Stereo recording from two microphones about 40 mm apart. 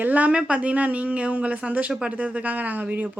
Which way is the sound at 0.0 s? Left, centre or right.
Right.